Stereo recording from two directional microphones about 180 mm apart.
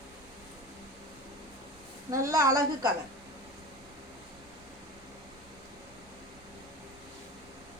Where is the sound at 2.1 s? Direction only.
15° right (ahead or behind).